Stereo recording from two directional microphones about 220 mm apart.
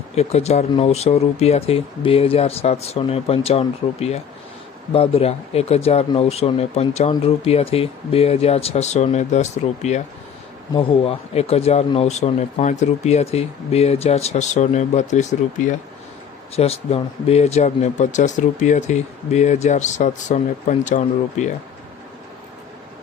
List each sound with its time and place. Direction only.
0.2 s speech: 30° left (ahead or behind)